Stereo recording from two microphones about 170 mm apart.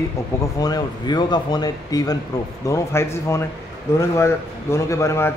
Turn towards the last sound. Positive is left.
turn(degrees=15)  # may be behind; listen again after turning